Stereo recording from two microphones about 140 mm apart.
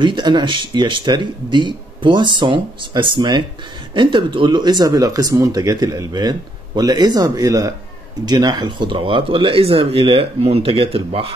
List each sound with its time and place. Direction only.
0.0 s speech: 35° right (ahead or behind)